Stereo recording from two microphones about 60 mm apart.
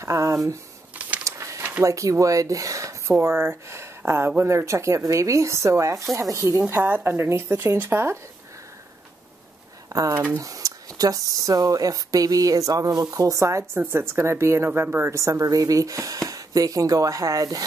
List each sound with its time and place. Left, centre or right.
0.0 s speech: right
0.9 s a sound: right
1.2 s a sound: right
1.8 s speech: right
6.7 s speech: right
9.8 s a sound: right
10.3 s speech: right
13.7 s speech: right
14.7 s speech: right